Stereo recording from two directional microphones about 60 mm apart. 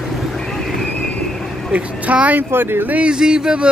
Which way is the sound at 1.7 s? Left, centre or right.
Right.